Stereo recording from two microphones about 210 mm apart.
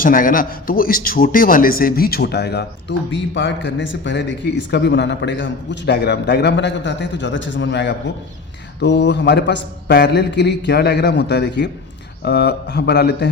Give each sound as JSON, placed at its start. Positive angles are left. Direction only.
{"t": 0.0, "sound": "a man's voice", "side_deg": 40}